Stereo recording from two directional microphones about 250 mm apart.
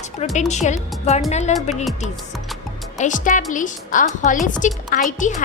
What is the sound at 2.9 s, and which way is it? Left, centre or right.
A woman's voice, left.